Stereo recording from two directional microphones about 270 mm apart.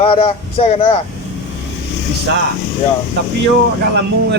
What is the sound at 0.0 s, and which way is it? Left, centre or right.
Speech, left.